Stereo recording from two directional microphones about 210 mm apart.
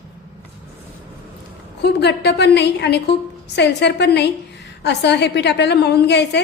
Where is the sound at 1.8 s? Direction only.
55° left (ahead or behind).